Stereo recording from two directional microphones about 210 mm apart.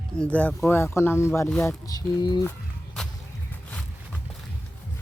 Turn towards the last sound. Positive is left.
turn(degrees=5)  # may be behind; listen again after turning